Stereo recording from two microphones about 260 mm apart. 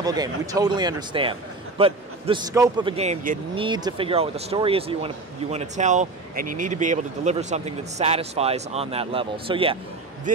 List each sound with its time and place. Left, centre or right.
0.0 s a man's voice: centre; by 10.4 s right